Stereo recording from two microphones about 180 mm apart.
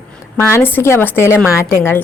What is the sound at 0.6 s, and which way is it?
A woman's voice, 15° left (ahead or behind).